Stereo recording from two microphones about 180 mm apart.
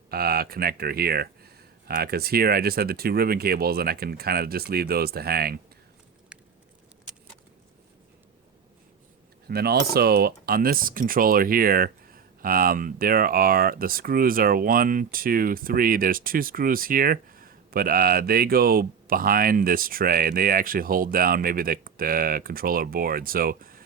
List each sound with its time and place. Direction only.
0.1 s speech: 60° right (ahead or behind)
9.5 s speech: 60° right (ahead or behind)